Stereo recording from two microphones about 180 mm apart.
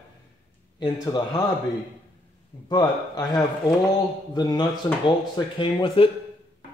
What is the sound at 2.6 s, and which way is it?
A man's voice, 20° left (ahead or behind).